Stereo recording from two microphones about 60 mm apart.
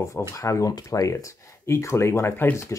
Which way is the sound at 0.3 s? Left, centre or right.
Left.